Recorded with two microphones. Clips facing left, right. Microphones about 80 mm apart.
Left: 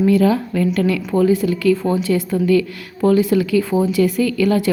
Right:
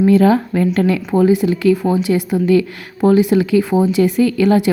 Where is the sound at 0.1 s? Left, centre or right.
Right.